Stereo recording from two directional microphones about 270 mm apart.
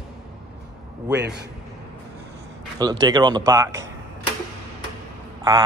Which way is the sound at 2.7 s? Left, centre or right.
Centre.